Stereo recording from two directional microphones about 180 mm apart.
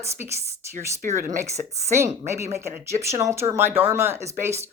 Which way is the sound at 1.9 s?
15° right (ahead or behind).